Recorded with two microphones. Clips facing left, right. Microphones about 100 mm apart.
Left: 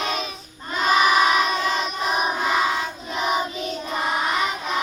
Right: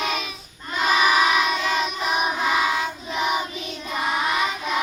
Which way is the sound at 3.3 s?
40° left (ahead or behind).